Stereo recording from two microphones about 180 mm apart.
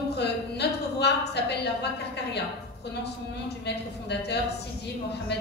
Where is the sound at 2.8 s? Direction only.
70° left (ahead or behind).